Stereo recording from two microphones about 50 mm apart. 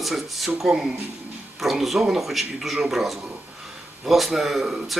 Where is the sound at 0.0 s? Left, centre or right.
Centre.